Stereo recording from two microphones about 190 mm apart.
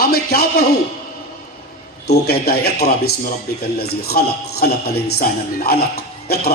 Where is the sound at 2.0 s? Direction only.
55° left (ahead or behind).